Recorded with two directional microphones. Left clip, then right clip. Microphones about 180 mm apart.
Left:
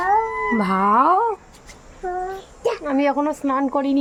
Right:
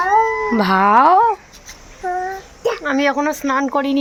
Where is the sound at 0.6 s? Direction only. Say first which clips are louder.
Right 5 dB; 10° right (ahead or behind).